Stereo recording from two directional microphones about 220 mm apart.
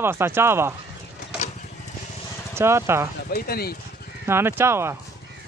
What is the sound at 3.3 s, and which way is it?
Speech, 45° left (ahead or behind).